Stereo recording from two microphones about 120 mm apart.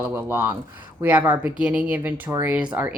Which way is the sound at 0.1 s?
20° right (ahead or behind).